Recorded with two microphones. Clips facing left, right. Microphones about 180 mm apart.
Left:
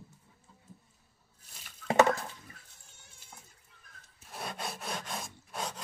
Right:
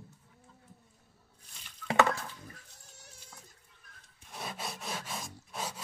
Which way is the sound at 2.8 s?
40° right (ahead or behind).